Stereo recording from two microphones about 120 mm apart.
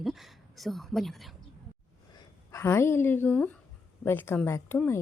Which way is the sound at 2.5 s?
20° left (ahead or behind).